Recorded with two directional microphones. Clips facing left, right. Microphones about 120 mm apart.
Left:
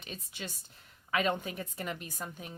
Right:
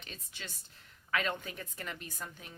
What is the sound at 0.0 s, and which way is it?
A woman's voice, 15° left (ahead or behind).